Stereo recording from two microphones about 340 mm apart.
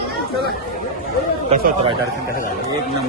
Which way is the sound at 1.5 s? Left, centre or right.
Centre.